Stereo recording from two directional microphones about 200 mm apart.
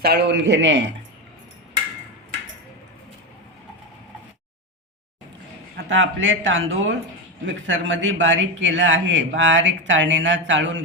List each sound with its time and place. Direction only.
0.0 s a man's voice: 55° right (ahead or behind)
5.7 s a man's voice: 70° right (ahead or behind)